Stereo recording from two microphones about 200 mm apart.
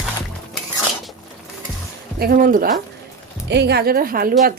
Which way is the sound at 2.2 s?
45° right (ahead or behind).